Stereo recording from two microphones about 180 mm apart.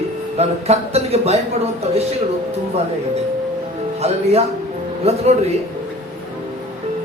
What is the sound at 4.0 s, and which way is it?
Speech, 35° right (ahead or behind).